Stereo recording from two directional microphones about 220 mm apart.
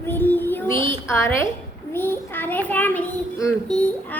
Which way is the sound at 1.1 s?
10° left (ahead or behind).